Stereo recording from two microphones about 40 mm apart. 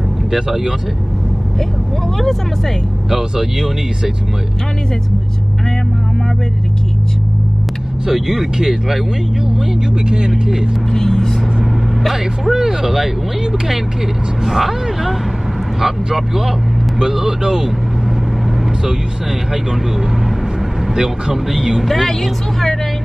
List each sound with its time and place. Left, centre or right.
0.3 s speech: centre
3.1 s speech: centre
8.1 s speech: centre
10.0 s speech: centre
10.9 s speech: centre
12.0 s speech: centre
20.8 s speech: centre
21.8 s speech: centre